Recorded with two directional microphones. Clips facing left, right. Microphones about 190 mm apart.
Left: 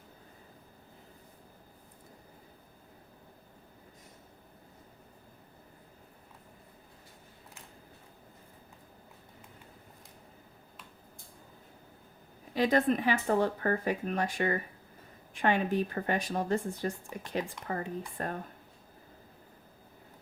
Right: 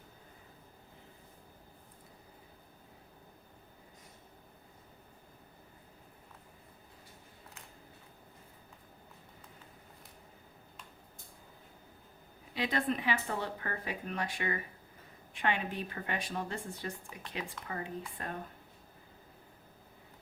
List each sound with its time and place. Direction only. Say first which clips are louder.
12.5 s speech: left 7 dB; 45° left (ahead or behind)